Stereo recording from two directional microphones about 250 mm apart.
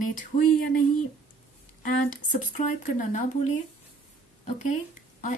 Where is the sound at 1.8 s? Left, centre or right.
Left.